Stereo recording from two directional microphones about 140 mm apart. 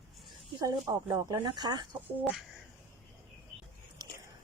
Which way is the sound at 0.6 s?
25° right (ahead or behind).